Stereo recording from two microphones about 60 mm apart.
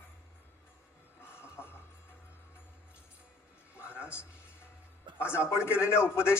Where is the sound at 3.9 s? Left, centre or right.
Right.